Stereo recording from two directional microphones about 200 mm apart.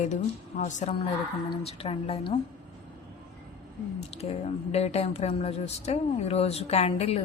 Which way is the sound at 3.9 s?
30° left (ahead or behind).